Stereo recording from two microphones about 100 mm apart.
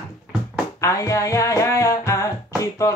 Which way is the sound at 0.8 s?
30° left (ahead or behind).